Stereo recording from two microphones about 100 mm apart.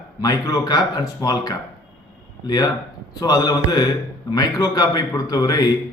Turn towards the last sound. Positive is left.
turn(degrees=40)  # may be behind; listen again after turning